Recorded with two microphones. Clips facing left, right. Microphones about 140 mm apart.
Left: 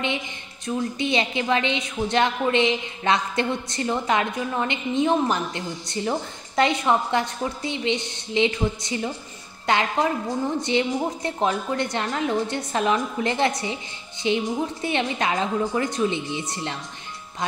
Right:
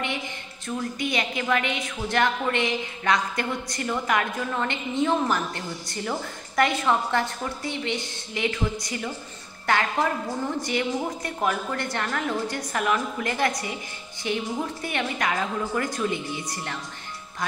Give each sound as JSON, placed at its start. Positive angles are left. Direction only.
{"t": 0.7, "sound": "a woman's voice", "side_deg": 25}